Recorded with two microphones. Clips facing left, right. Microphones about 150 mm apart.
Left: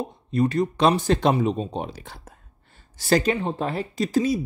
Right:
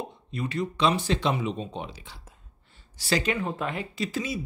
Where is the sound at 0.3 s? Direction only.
40° left (ahead or behind).